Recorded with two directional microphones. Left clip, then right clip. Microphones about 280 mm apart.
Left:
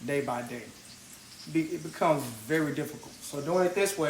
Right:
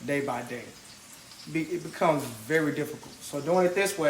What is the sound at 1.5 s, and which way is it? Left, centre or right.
Speech, centre.